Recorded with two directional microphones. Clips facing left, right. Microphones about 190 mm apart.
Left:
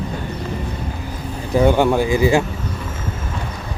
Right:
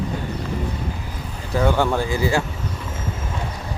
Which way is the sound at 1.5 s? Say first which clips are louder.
Left 5 dB; 15° left (ahead or behind).